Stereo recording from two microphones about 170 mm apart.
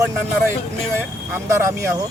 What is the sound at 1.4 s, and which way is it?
Speech, 15° right (ahead or behind).